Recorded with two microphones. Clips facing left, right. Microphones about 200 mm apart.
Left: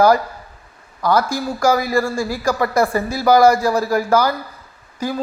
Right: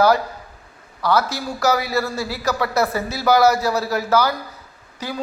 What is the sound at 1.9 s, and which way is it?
A man's voice, 10° left (ahead or behind).